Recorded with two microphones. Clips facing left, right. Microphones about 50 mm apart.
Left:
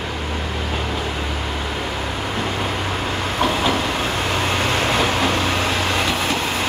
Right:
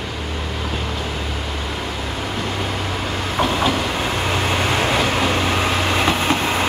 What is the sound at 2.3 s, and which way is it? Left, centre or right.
Train, centre.